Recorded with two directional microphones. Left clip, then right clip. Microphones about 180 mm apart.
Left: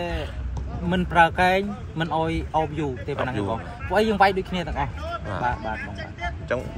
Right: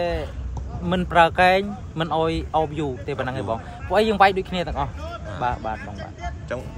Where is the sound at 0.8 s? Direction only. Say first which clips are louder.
Right 1 dB; 10° right (ahead or behind).